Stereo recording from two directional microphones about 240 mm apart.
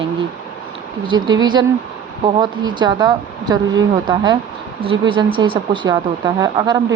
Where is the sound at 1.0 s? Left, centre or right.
Centre.